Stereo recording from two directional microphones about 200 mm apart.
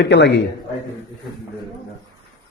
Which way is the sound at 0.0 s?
60° left (ahead or behind).